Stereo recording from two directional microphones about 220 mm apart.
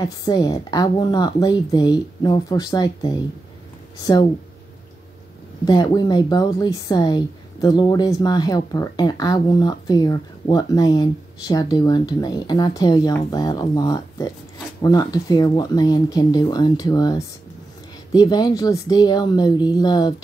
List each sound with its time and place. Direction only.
0.0 s speech: 15° left (ahead or behind)
5.7 s speech: 20° left (ahead or behind)